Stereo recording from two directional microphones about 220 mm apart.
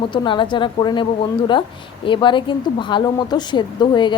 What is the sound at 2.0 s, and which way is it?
Speech, 20° left (ahead or behind).